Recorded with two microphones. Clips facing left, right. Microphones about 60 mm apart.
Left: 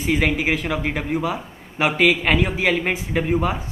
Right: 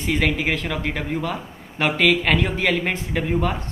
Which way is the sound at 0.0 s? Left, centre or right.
Centre.